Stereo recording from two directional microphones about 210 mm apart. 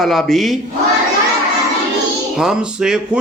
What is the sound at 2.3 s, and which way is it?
Speech, 5° right (ahead or behind).